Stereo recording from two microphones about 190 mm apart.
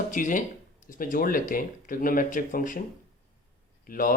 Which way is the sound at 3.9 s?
45° left (ahead or behind).